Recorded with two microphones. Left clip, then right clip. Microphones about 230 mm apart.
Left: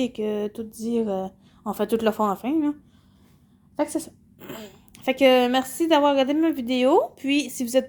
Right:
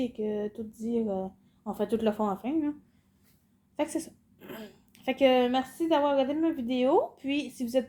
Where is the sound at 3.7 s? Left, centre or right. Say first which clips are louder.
Left 5 dB; centre.